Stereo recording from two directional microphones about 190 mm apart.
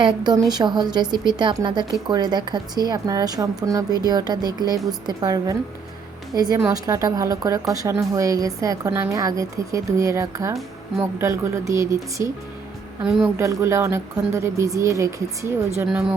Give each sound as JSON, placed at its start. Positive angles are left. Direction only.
{"t": 0.0, "sound": "a woman's voice", "side_deg": -20}
{"t": 13.1, "sound": "a woman's voice", "side_deg": -5}
{"t": 13.4, "sound": "a woman's voice", "side_deg": -15}
{"t": 15.9, "sound": "a woman's voice", "side_deg": -5}